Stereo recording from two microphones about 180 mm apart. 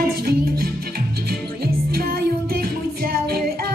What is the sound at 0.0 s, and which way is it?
Music, 55° right (ahead or behind).